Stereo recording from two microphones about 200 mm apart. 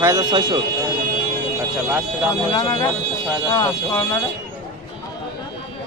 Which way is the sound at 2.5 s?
20° left (ahead or behind).